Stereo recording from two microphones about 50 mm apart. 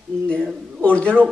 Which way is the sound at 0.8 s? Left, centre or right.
Left.